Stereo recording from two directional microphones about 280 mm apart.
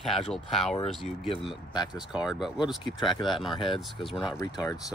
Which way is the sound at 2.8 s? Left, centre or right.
Centre.